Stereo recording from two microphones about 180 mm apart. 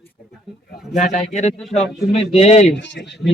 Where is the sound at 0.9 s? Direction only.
40° left (ahead or behind).